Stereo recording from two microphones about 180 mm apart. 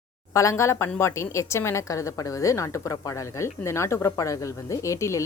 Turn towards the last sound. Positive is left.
turn(degrees=15)  # may be behind; listen again after turning